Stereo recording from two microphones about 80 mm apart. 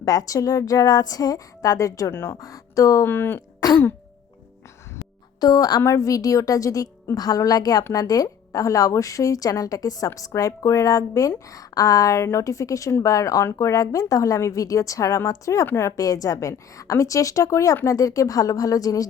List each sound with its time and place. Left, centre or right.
0.0 s a woman's voice: left
2.1 s speech: left
2.4 s a woman's voice: left
3.1 s speech: left
5.4 s a woman's voice: left
5.8 s a woman's voice: left